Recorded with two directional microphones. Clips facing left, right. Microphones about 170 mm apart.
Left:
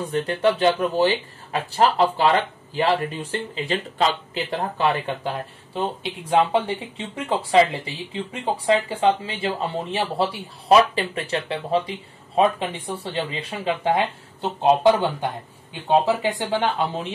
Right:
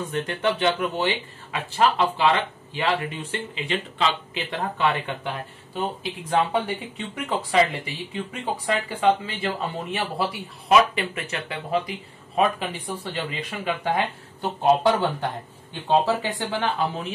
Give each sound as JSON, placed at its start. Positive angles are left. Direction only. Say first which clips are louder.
{"t": 0.1, "sound": "speech", "louder": "left 5 dB", "side_deg": 30}
{"t": 6.5, "sound": "speech", "louder": "left 3 dB", "side_deg": 30}
{"t": 16.3, "sound": "speech", "louder": "left 3 dB", "side_deg": 25}